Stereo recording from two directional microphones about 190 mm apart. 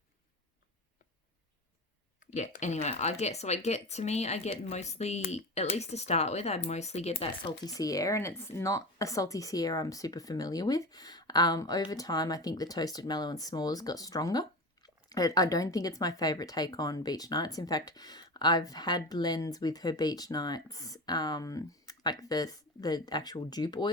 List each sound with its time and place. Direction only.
2.3 s speech: 40° left (ahead or behind)
7.6 s speech: 20° left (ahead or behind)